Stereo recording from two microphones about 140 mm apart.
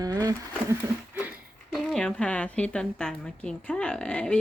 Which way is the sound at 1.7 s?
Centre (ahead or behind).